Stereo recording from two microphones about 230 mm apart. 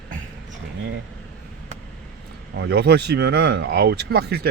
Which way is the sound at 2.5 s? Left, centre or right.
Right.